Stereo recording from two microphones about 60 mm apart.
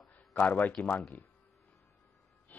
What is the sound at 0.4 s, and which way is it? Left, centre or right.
Speech, left.